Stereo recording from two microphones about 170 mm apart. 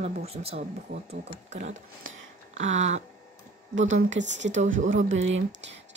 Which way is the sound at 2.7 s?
40° right (ahead or behind).